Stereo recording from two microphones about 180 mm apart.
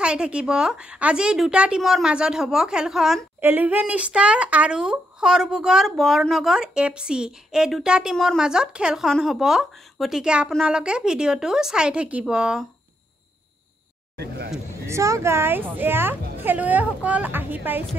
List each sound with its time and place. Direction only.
0.0 s speech: 5° right (ahead or behind)
14.1 s speech: 65° right (ahead or behind)
14.9 s a woman's voice: 15° right (ahead or behind)